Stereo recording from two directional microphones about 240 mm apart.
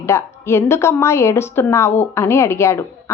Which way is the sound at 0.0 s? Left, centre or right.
Centre.